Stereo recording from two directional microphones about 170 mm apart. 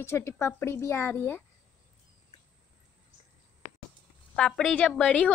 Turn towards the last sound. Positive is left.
turn(degrees=5)  # may be behind; listen again after turning